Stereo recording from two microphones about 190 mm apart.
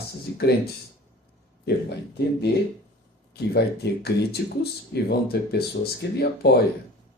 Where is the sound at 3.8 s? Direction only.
60° left (ahead or behind).